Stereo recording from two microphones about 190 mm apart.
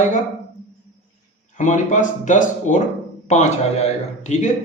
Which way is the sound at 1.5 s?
40° left (ahead or behind).